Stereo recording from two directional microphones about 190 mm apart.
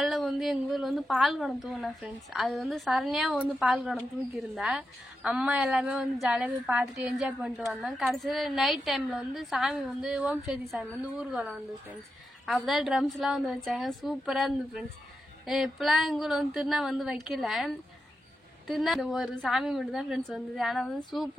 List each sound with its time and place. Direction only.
0.0 s a woman's voice: centre (ahead or behind)
18.7 s a woman's voice: centre (ahead or behind)